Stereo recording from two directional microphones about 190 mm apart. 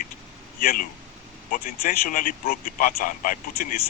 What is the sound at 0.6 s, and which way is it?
Speech, 45° left (ahead or behind).